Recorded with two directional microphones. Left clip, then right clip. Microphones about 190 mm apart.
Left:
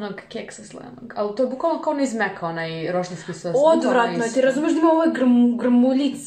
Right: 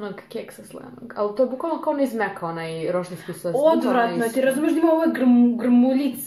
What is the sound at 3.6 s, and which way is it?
A woman's voice, 15° right (ahead or behind).